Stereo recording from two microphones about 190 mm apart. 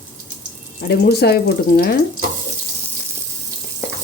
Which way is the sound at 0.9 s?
60° left (ahead or behind).